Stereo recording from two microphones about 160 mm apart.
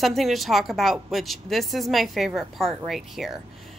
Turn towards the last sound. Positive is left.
turn(degrees=0)  # may be behind; listen again after turning